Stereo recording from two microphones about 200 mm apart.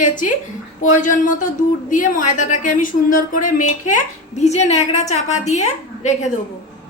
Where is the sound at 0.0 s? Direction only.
40° left (ahead or behind).